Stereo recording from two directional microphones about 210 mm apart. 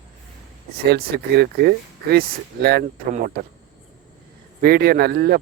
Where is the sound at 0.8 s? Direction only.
50° right (ahead or behind).